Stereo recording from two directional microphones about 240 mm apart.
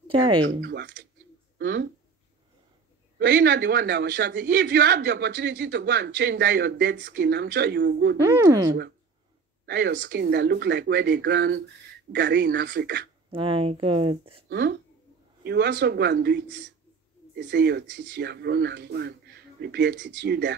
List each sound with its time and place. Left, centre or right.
0.1 s speech: right
0.6 s a man's voice: right
3.2 s a man's voice: right
8.4 s speech: centre
9.7 s a man's voice: right
13.3 s speech: right
14.5 s a man's voice: right